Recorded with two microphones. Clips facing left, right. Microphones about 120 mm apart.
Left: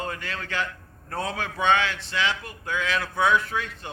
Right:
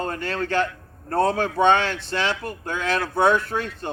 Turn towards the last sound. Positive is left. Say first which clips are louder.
# right 4 dB
turn(degrees=-40)  # may be behind; listen again after turning